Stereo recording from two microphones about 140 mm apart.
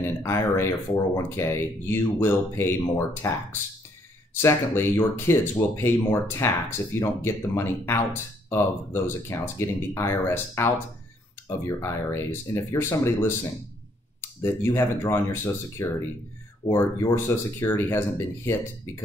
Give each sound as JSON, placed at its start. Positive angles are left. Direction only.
{"t": 0.2, "sound": "speech", "side_deg": 20}
{"t": 14.4, "sound": "speech", "side_deg": 20}